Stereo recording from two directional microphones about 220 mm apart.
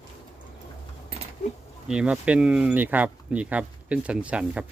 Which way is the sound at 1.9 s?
5° right (ahead or behind).